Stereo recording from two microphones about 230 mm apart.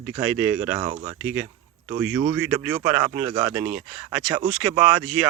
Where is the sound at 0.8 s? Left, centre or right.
Right.